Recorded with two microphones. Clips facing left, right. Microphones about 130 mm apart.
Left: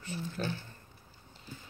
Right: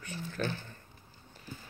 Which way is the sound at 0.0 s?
20° left (ahead or behind).